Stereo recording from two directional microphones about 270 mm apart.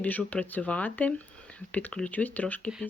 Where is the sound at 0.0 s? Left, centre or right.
Centre.